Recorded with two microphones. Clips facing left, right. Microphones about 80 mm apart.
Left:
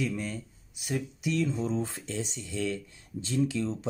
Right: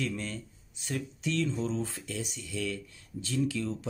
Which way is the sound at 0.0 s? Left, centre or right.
Centre.